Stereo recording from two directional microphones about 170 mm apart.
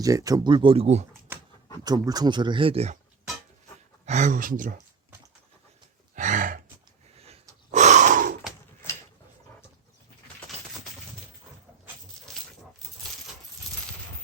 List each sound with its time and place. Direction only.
0.0 s speech: 20° right (ahead or behind); by 1.0 s 40° right (ahead or behind)
1.8 s speech: 25° right (ahead or behind); by 3.0 s 40° right (ahead or behind)
4.0 s speech: 45° right (ahead or behind)
6.1 s gasp: 50° right (ahead or behind)